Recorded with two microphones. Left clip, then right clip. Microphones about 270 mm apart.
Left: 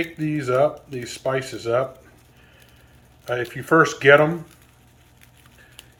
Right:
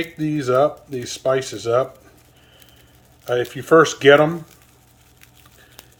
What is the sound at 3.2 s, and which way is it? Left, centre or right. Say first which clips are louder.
Speech: right 4 dB; right.